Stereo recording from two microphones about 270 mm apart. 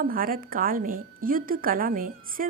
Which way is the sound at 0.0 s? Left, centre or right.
Right.